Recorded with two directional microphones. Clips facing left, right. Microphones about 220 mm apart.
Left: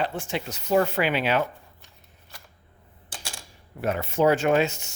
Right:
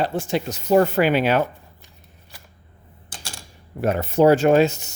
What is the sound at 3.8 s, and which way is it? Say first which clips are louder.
Speech: right 6 dB; 40° right (ahead or behind).